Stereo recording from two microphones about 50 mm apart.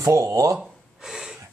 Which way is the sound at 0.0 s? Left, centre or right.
Right.